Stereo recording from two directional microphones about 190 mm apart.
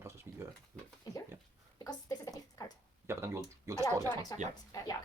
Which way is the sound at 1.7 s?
20° left (ahead or behind).